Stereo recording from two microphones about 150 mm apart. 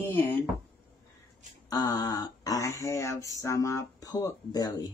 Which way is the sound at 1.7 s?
25° left (ahead or behind).